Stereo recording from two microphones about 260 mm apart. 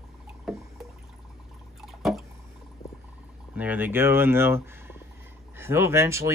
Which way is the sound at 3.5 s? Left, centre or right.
Centre.